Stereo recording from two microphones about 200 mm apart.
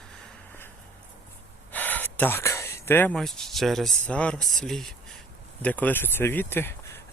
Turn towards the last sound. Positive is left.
turn(degrees=10)  # may be behind; listen again after turning